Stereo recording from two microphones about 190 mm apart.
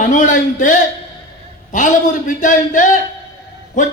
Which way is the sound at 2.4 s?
40° left (ahead or behind).